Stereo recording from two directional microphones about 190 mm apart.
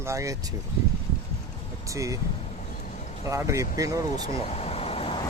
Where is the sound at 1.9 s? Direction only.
15° right (ahead or behind).